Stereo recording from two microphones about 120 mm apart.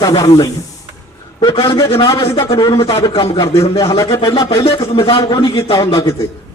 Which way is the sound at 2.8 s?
30° left (ahead or behind).